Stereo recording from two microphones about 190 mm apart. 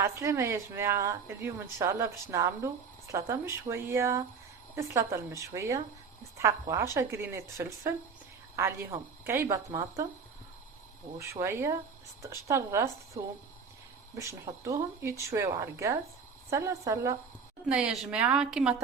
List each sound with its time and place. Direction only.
0.0 s a woman's voice: 15° right (ahead or behind)
11.2 s a woman's voice: 15° right (ahead or behind)
14.2 s a woman's voice: 15° right (ahead or behind)
17.7 s a woman's voice: 5° right (ahead or behind)